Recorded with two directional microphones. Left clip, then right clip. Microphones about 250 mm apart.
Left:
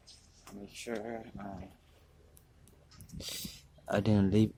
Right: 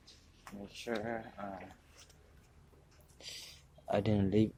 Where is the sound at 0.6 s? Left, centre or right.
Centre.